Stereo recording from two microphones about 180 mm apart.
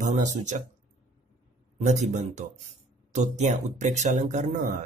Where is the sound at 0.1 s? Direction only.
45° right (ahead or behind).